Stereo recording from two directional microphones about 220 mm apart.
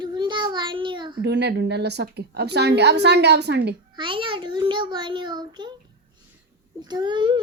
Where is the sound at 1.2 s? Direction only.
50° right (ahead or behind).